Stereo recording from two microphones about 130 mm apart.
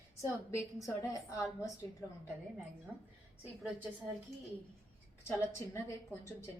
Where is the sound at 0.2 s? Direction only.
20° left (ahead or behind).